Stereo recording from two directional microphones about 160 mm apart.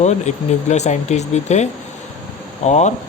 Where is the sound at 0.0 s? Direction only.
45° left (ahead or behind).